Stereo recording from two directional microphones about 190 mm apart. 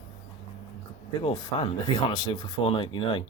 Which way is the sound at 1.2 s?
25° left (ahead or behind).